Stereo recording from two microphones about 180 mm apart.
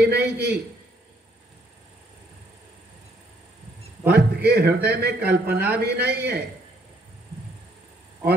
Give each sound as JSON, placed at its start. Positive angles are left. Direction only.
{"t": 0.0, "sound": "a man's voice", "side_deg": -65}
{"t": 4.1, "sound": "a man's voice", "side_deg": -65}